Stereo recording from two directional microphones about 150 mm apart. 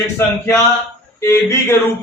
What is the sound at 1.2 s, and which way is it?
Speech, 15° left (ahead or behind).